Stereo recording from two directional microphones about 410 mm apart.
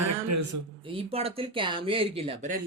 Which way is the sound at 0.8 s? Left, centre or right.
Centre.